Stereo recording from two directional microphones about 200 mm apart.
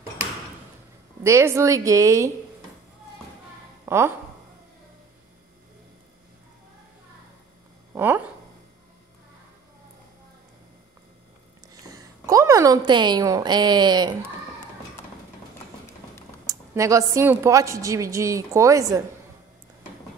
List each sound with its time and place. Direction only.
1.2 s a woman's voice: 15° right (ahead or behind)
3.8 s speech: 10° right (ahead or behind)
7.9 s speech: 10° right (ahead or behind)
11.8 s a woman's voice: 15° right (ahead or behind)
16.4 s a woman's voice: 15° right (ahead or behind)